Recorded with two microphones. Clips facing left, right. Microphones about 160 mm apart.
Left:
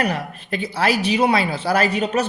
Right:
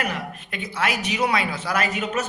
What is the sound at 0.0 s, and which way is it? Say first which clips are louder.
Speech: left 5 dB; 35° left (ahead or behind).